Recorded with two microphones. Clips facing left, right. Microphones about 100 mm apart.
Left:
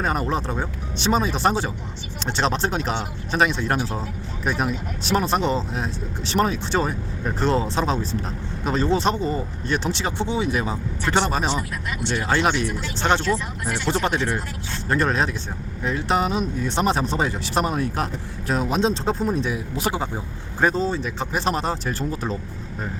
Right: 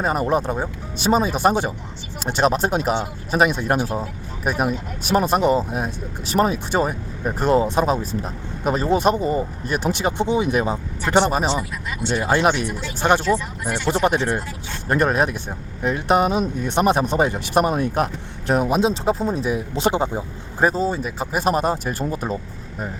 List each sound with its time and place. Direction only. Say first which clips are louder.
0.0 s speech: right 4 dB; 10° right (ahead or behind)
19.5 s speech: right 4 dB; 25° right (ahead or behind)